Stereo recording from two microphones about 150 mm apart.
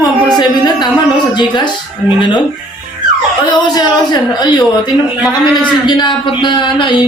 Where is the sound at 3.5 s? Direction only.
30° left (ahead or behind).